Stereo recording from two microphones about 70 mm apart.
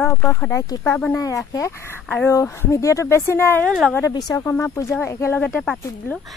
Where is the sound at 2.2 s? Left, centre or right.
Left.